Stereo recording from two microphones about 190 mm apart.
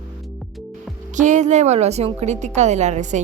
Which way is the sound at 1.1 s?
40° right (ahead or behind).